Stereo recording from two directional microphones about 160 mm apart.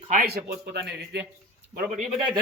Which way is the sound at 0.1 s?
65° right (ahead or behind).